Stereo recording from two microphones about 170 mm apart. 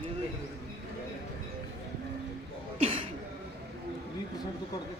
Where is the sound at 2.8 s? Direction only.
30° right (ahead or behind).